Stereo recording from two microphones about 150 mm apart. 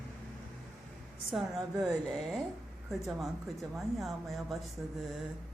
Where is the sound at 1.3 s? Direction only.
Centre (ahead or behind).